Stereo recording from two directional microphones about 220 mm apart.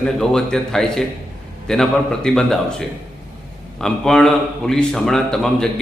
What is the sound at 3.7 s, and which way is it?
A man's voice, centre (ahead or behind).